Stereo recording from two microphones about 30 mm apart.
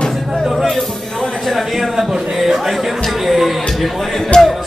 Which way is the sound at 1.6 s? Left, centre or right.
Centre.